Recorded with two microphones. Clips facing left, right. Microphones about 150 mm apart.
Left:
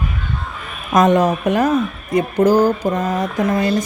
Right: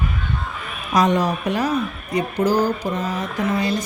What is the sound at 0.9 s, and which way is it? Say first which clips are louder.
Speech: left 5 dB; 50° left (ahead or behind).